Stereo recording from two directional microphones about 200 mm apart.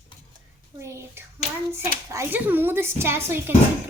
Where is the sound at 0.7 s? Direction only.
15° right (ahead or behind).